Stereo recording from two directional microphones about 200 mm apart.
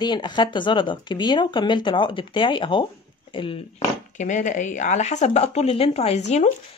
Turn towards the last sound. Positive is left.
turn(degrees=35)  # may be behind; listen again after turning